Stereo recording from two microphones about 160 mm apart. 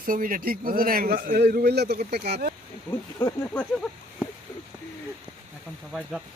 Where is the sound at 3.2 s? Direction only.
15° left (ahead or behind).